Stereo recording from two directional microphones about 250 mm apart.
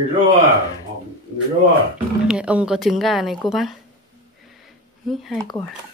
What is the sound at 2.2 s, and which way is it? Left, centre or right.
Speech, centre.